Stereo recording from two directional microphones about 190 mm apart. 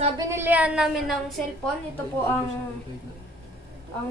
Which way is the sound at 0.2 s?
15° right (ahead or behind).